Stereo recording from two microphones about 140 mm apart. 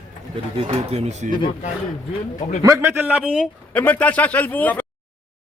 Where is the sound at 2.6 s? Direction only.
20° right (ahead or behind).